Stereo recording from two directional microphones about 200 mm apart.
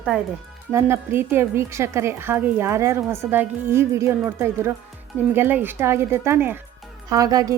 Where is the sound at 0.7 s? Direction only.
10° right (ahead or behind).